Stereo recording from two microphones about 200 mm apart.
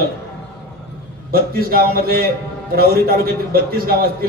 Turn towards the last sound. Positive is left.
turn(degrees=-50)  # may be behind; listen again after turning